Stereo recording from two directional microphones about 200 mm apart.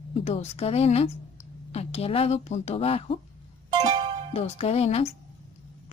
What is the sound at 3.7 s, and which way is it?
Music, 20° right (ahead or behind).